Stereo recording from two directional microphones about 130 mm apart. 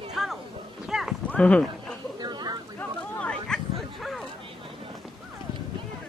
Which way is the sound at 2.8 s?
10° left (ahead or behind).